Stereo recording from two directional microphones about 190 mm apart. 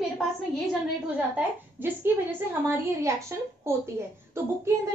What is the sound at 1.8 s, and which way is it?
A woman's voice, 10° right (ahead or behind).